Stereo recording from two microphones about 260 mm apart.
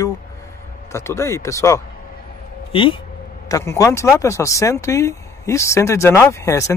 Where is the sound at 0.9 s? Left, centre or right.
Centre.